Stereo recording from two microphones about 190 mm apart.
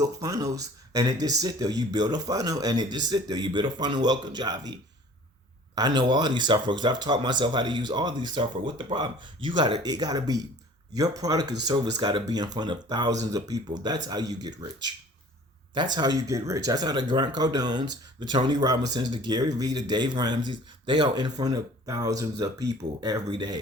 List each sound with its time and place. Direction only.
0.0 s speech: 20° right (ahead or behind)
5.7 s speech: 25° right (ahead or behind)